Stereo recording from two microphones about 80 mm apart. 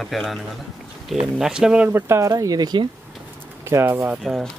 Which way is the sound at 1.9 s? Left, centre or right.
Right.